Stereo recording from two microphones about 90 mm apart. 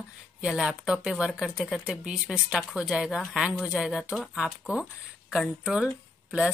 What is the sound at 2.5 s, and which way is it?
Speech, centre (ahead or behind).